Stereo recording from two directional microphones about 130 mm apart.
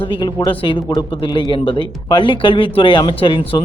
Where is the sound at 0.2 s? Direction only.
35° left (ahead or behind).